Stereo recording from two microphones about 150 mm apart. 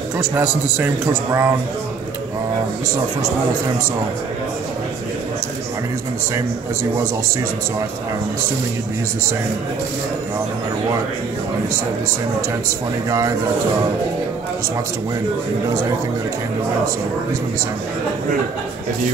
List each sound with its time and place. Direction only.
0.2 s a man's voice: 5° right (ahead or behind)
1.0 s a man's voice: 20° right (ahead or behind)
12.4 s a man's voice: 20° right (ahead or behind)